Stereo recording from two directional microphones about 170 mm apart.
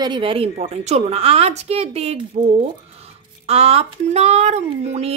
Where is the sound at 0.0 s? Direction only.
30° right (ahead or behind).